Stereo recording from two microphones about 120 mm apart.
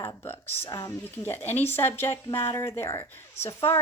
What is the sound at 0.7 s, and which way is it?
Speech, 30° left (ahead or behind).